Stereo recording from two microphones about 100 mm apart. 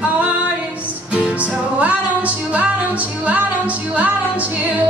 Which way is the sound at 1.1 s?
15° right (ahead or behind).